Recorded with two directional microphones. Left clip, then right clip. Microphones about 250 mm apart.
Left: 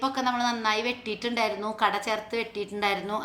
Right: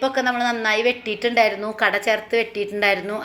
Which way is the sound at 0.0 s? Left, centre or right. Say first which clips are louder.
Right 6 dB; centre.